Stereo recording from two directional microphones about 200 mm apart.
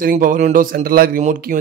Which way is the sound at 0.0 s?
40° right (ahead or behind).